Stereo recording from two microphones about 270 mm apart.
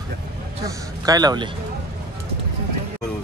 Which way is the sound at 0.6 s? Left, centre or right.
Centre.